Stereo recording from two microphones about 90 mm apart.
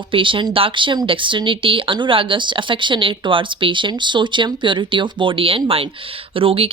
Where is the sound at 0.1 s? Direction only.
70° right (ahead or behind).